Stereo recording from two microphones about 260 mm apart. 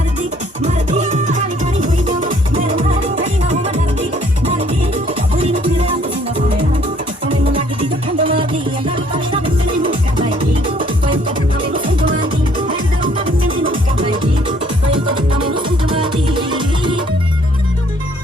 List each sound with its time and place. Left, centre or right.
0.6 s music: right
5.4 s music: right
7.3 s music: centre
15.1 s music: centre